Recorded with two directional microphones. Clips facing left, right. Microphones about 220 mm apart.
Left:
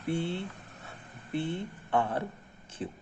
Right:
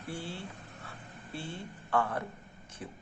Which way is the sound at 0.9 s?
20° left (ahead or behind).